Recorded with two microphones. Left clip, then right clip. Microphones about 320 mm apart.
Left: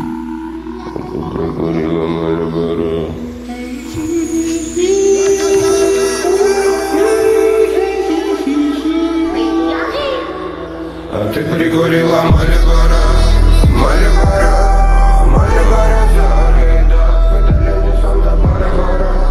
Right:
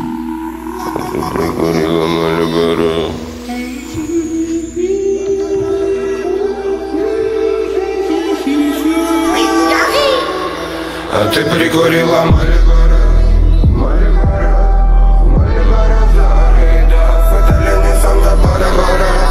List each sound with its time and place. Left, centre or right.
1.4 s mantra: right
4.5 s music: left
5.2 s music: left
6.9 s music: left; by 9.5 s right
9.6 s music: right
11.1 s music: right; by 12.4 s centre
13.6 s music: left
14.2 s music: left
15.3 s music: left
18.0 s music: right